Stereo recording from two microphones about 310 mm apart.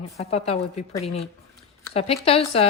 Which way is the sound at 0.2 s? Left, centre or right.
Centre.